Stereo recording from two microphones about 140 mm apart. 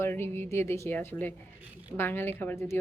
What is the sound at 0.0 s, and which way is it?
Speech, 15° left (ahead or behind).